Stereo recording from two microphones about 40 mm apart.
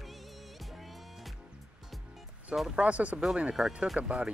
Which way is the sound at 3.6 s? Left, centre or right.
Centre.